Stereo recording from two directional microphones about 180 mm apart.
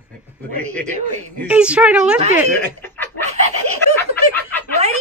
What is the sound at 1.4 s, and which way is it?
Speech, 5° right (ahead or behind).